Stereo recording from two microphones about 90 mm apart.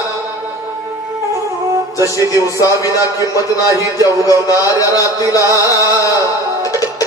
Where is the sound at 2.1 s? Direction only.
40° left (ahead or behind).